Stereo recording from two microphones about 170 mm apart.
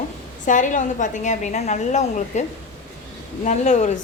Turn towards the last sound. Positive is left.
turn(degrees=45)  # may be behind; listen again after turning